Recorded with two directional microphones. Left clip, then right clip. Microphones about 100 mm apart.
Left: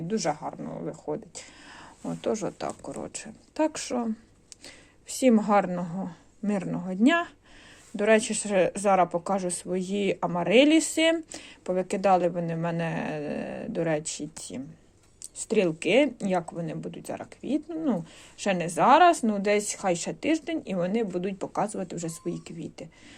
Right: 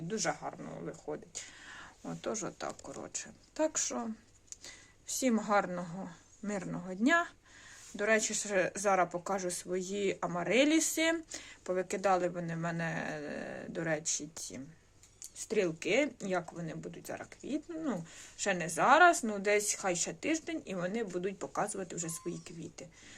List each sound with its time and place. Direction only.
0.1 s speech: 30° left (ahead or behind); by 4.0 s 45° left (ahead or behind)
4.6 s a sound: 40° left (ahead or behind)
5.3 s speech: 35° left (ahead or behind)